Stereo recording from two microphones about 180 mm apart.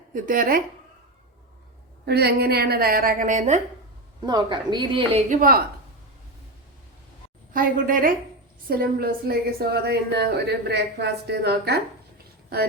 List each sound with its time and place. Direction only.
0.1 s a woman's voice: 50° right (ahead or behind)
2.0 s a woman's voice: 65° right (ahead or behind); by 3.6 s 40° right (ahead or behind)
4.2 s a woman's voice: 25° right (ahead or behind)
5.3 s a woman's voice: 50° right (ahead or behind)
7.5 s a woman's voice: 50° right (ahead or behind)